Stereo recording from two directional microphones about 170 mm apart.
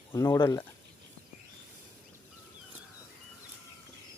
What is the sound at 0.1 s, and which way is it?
Speech, 15° left (ahead or behind).